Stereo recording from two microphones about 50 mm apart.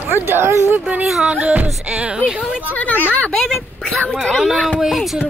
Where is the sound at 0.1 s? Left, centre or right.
Right.